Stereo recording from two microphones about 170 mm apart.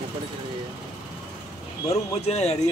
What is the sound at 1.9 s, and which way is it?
Speech, 40° left (ahead or behind).